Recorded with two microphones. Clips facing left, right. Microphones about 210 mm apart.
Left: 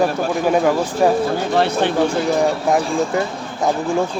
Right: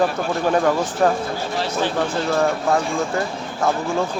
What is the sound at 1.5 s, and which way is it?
Speech, 60° left (ahead or behind).